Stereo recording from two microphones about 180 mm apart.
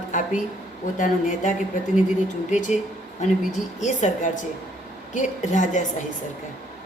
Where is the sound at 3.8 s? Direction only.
40° left (ahead or behind).